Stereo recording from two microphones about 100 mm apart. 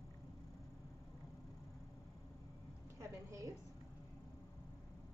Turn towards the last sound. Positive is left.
turn(degrees=-30)  # may be behind; listen again after turning